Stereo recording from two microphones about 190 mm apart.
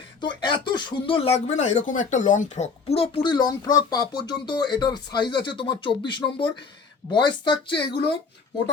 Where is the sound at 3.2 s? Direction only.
20° left (ahead or behind).